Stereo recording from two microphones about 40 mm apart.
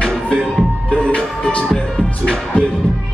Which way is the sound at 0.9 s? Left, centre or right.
Centre.